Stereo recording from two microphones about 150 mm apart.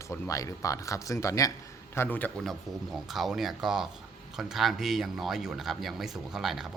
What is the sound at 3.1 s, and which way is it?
Speech, centre (ahead or behind).